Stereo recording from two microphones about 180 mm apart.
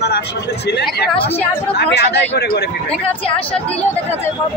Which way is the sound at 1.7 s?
65° left (ahead or behind).